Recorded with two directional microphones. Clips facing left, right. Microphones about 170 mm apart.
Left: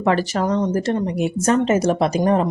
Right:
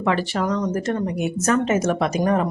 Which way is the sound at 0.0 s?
40° left (ahead or behind).